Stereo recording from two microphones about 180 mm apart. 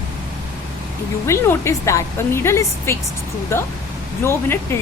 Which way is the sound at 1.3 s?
15° left (ahead or behind).